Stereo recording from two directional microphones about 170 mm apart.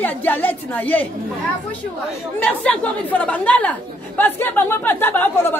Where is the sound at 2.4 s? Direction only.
10° left (ahead or behind).